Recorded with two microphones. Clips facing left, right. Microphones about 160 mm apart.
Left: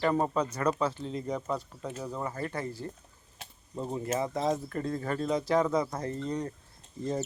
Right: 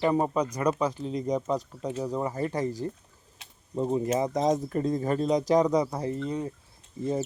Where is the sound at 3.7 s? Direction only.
20° right (ahead or behind).